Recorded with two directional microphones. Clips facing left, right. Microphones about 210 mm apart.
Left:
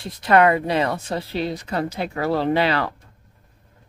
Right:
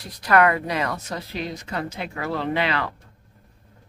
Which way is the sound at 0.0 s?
25° left (ahead or behind).